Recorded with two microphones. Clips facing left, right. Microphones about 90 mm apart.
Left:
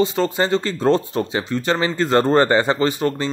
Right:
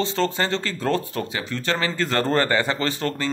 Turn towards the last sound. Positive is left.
turn(degrees=15)  # may be behind; listen again after turning